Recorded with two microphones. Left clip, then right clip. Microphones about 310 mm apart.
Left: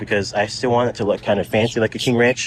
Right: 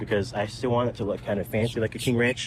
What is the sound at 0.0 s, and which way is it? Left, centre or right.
Speech, centre.